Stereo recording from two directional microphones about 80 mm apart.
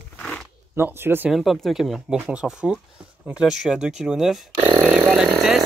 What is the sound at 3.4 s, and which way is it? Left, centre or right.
Speech, centre.